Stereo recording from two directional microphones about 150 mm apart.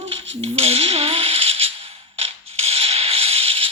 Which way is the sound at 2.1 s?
40° right (ahead or behind).